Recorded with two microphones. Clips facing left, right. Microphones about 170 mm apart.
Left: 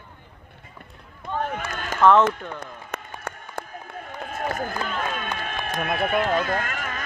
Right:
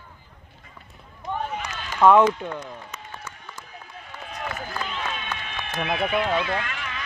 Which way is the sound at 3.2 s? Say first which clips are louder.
Left 7 dB; 55° left (ahead or behind).